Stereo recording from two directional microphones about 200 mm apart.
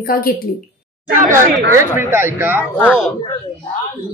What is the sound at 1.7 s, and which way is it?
Speech, 10° right (ahead or behind).